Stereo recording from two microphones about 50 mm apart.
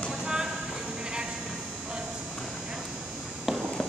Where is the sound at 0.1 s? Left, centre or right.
Centre.